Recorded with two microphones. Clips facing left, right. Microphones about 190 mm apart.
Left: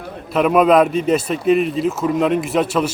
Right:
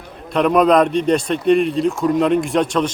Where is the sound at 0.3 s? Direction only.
5° left (ahead or behind).